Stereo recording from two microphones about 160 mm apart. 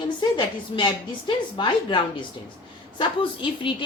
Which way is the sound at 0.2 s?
30° left (ahead or behind).